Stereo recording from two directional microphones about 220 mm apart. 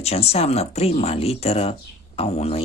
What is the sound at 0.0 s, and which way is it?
Speech, 30° left (ahead or behind).